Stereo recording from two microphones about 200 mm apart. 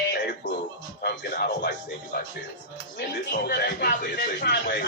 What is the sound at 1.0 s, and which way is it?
Speech, 55° left (ahead or behind).